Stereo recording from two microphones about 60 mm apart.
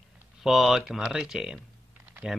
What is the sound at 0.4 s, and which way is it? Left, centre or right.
Speech, centre.